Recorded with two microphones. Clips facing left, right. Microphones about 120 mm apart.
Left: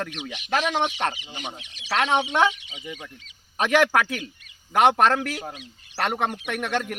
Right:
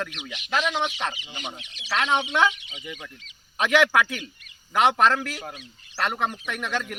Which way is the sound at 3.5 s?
40° left (ahead or behind).